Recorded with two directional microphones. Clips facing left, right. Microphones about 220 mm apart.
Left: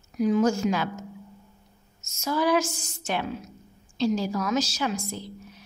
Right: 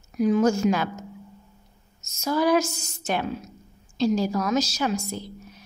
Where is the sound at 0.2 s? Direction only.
50° right (ahead or behind).